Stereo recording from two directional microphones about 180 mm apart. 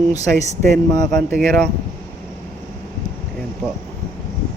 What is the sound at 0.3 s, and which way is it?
Speech, 40° right (ahead or behind).